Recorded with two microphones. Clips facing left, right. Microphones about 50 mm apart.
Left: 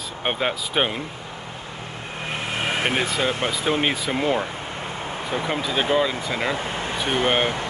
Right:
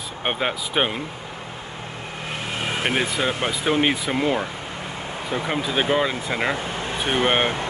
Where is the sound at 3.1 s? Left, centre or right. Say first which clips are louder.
Even; right.